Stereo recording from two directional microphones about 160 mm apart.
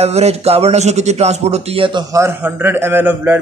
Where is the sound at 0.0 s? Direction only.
40° right (ahead or behind).